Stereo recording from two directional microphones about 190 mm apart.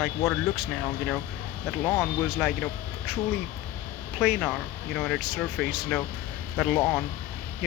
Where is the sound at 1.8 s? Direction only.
10° left (ahead or behind).